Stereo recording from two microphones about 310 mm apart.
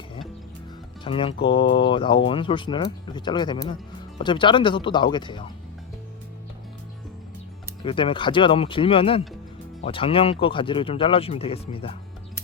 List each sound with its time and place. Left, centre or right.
1.0 s speech: centre
7.8 s speech: centre